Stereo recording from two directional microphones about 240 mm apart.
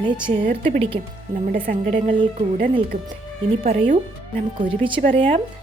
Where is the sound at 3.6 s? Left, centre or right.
Right.